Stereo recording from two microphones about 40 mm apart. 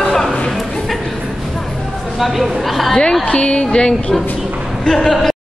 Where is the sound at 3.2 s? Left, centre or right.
Left.